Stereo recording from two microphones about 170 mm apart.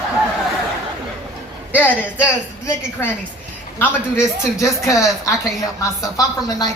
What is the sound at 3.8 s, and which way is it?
A woman's voice, 15° left (ahead or behind).